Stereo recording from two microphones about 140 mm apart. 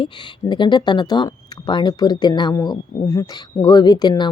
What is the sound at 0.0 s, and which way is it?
Speech, 35° left (ahead or behind).